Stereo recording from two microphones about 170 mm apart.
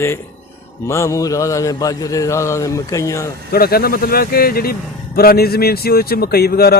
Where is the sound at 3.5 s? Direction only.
65° left (ahead or behind).